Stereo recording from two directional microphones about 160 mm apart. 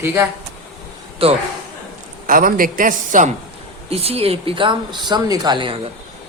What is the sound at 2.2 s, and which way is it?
A man's voice, 60° right (ahead or behind).